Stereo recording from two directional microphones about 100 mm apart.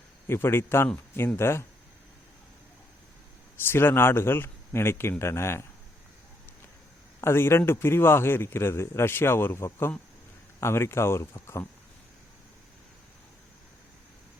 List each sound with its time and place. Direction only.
0.3 s speech: 25° left (ahead or behind)
3.7 s speech: 20° left (ahead or behind)
7.2 s speech: 25° left (ahead or behind)